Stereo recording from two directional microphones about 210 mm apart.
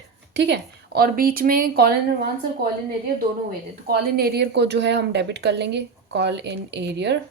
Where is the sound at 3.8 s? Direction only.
50° right (ahead or behind).